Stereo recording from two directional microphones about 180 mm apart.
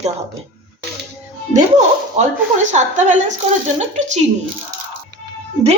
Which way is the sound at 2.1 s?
40° right (ahead or behind).